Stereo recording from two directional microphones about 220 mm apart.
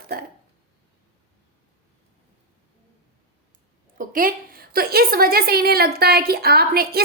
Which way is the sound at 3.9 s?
40° right (ahead or behind).